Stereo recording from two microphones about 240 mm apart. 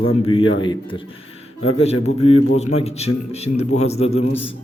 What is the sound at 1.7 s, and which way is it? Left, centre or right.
A man's voice, left.